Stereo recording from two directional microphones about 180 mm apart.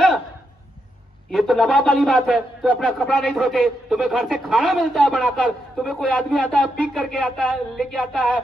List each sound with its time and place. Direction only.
1.3 s a man's voice: centre (ahead or behind)